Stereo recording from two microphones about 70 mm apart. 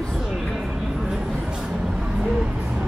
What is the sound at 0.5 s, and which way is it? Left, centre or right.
Vehicle, centre.